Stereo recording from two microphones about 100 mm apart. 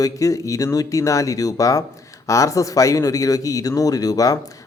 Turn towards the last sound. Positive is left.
turn(degrees=35)  # may be behind; listen again after turning